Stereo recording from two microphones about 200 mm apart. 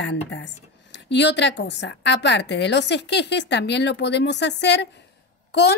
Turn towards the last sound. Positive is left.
turn(degrees=55)  # may be behind; listen again after turning